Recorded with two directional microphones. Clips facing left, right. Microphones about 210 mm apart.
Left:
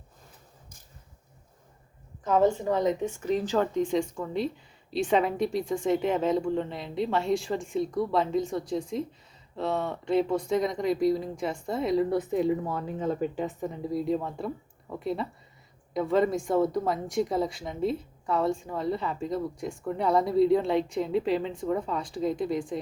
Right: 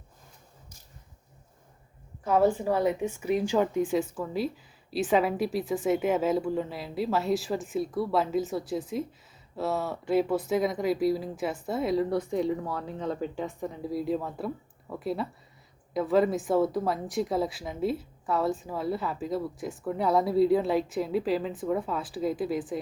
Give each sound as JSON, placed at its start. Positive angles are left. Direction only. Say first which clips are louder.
{"t": 2.2, "sound": "a woman's voice", "louder": "even", "side_deg": -10}